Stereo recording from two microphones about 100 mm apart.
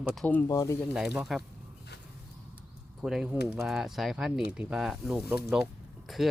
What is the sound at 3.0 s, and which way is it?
Speech, 5° right (ahead or behind).